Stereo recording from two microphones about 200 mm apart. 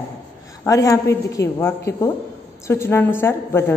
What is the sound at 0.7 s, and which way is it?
A woman's voice, 15° left (ahead or behind).